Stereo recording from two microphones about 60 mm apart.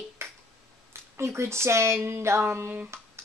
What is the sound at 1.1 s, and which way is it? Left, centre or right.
Speech, right.